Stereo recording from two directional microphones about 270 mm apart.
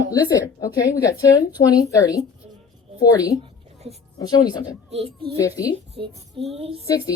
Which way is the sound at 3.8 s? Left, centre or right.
Right.